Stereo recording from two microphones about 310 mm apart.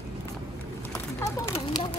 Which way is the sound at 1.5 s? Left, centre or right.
Centre.